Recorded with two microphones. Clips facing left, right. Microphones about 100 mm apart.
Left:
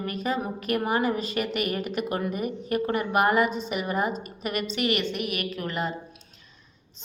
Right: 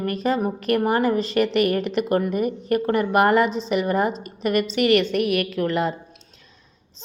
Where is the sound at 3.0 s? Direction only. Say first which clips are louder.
Right 4 dB; 65° right (ahead or behind).